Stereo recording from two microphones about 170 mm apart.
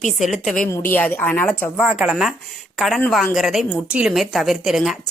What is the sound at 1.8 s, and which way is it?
A woman's voice, 5° right (ahead or behind).